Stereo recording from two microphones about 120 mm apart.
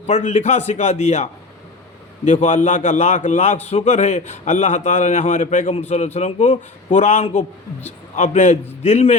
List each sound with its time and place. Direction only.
0.1 s a man's voice: 75° left (ahead or behind)
2.2 s a man's voice: 80° left
6.1 s a man's voice: 65° left (ahead or behind)